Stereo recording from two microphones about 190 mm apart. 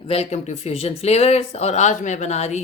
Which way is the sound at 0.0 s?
30° left (ahead or behind).